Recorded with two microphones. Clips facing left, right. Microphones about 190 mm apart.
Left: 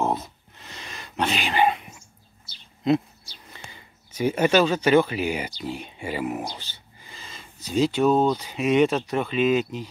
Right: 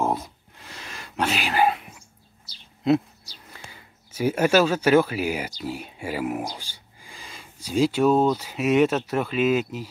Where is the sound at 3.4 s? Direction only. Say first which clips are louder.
Even; 5° right (ahead or behind).